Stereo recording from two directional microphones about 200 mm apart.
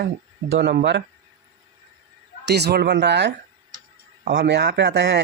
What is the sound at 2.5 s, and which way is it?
Speech, 55° right (ahead or behind).